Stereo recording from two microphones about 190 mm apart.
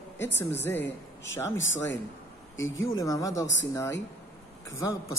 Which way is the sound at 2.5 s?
90° left.